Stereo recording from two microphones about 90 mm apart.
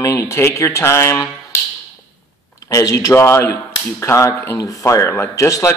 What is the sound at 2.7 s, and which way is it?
Speech, 35° left (ahead or behind).